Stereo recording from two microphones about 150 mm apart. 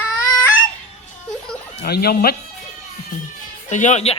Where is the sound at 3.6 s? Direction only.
55° left (ahead or behind).